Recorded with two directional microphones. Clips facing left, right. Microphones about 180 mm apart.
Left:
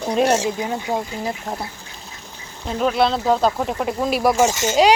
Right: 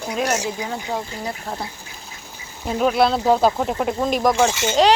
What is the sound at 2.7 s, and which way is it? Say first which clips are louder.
Speech: right 1 dB; 5° right (ahead or behind).